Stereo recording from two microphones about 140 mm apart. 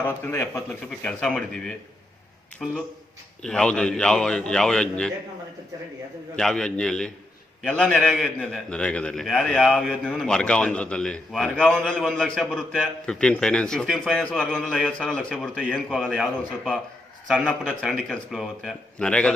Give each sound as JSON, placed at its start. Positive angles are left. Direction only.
{"t": 0.0, "sound": "a man's voice", "side_deg": 15}
{"t": 0.9, "sound": "a man's voice", "side_deg": 5}
{"t": 6.3, "sound": "a man's voice", "side_deg": 5}
{"t": 15.5, "sound": "a man's voice", "side_deg": -5}
{"t": 17.2, "sound": "a man's voice", "side_deg": 0}